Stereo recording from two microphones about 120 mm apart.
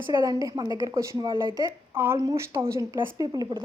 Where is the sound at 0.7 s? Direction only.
30° right (ahead or behind).